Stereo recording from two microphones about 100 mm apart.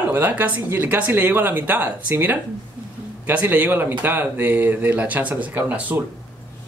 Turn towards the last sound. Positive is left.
turn(degrees=-15)  # may be behind; listen again after turning